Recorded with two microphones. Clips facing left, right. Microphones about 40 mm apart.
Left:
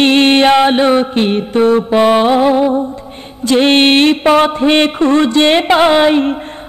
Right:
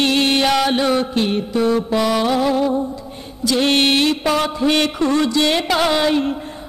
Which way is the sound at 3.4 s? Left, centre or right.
Left.